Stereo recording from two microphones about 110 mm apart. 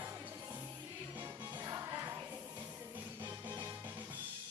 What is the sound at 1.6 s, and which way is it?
Music, 30° right (ahead or behind).